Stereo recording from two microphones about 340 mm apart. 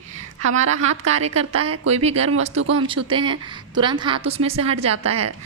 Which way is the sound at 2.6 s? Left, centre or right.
Right.